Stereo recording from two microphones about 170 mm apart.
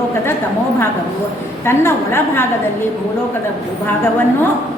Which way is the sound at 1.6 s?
15° left (ahead or behind).